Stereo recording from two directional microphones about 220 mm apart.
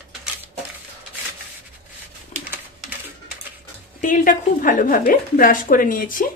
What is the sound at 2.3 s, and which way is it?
Pigeon, 35° left (ahead or behind).